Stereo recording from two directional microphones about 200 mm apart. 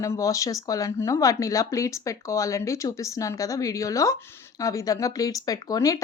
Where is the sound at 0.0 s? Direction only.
15° left (ahead or behind).